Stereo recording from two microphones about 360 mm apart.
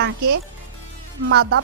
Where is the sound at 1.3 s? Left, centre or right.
Right.